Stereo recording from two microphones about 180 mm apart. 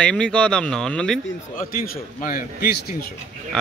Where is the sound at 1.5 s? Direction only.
50° left (ahead or behind).